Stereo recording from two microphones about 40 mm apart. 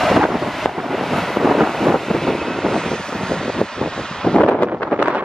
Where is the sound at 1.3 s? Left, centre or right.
Centre.